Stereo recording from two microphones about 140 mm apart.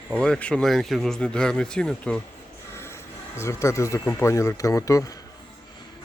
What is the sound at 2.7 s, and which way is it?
Speech, 15° left (ahead or behind).